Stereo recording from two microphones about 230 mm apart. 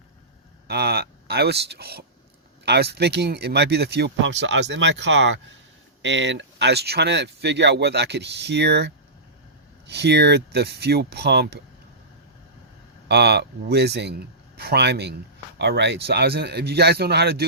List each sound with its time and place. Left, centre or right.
0.7 s speech: right
13.1 s speech: right